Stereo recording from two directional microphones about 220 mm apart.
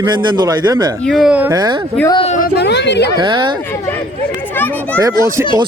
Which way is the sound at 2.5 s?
50° left (ahead or behind).